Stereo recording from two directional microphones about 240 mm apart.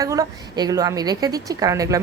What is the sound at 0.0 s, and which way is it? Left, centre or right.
A woman's voice, centre.